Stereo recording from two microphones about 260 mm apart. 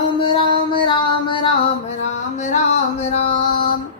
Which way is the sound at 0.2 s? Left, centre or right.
Centre.